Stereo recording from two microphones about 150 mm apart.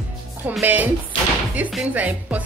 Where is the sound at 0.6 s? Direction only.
10° right (ahead or behind).